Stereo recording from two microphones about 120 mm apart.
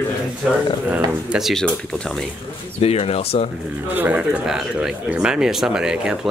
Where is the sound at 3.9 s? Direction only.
15° right (ahead or behind).